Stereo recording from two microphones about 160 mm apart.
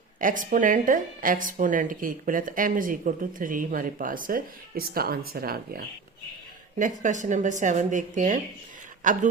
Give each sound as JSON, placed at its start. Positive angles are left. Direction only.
{"t": 0.2, "sound": "speech", "side_deg": -55}
{"t": 6.7, "sound": "a woman's voice", "side_deg": -55}